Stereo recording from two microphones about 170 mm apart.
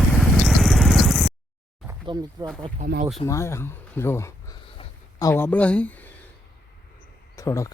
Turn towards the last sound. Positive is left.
turn(degrees=20)  # may be behind; listen again after turning